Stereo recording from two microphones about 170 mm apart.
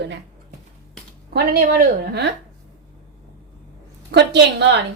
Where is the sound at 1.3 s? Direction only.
60° right (ahead or behind).